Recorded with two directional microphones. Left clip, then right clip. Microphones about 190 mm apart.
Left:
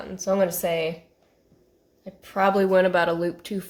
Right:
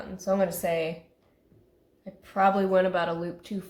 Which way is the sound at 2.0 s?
35° left (ahead or behind).